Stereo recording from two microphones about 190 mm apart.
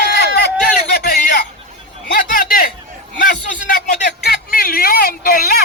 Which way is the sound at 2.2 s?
45° left (ahead or behind).